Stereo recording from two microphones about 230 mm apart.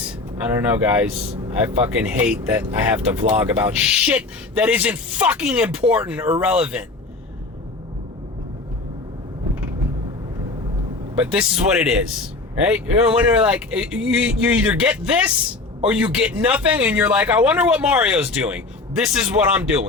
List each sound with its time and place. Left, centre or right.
0.0 s a man's voice: centre
11.2 s a man's voice: centre